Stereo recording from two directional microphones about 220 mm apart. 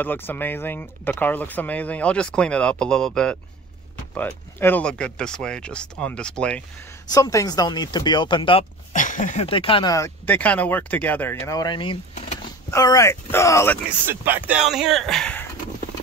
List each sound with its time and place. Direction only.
0.0 s speech: 10° left (ahead or behind)
7.1 s speech: 15° left (ahead or behind)
8.9 s speech: 35° left (ahead or behind); by 13.7 s 10° left (ahead or behind)
13.8 s speech: 10° right (ahead or behind)